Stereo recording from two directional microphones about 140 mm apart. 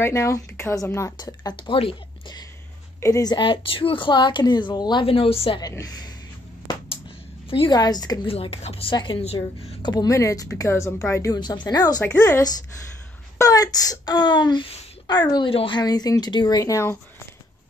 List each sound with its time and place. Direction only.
0.0 s speech: 20° left (ahead or behind)
3.0 s a woman's voice: 25° left (ahead or behind); by 5.6 s 40° left (ahead or behind)
5.6 s speech: 25° left (ahead or behind)
7.4 s a woman's voice: 40° left (ahead or behind)
7.8 s speech: 30° left (ahead or behind)
8.3 s a woman's voice: 45° left (ahead or behind); by 11.3 s 20° left (ahead or behind)
11.3 s a woman's voice: 30° left (ahead or behind)